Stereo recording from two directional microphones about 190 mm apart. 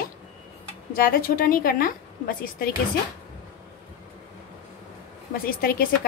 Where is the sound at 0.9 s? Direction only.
50° left (ahead or behind).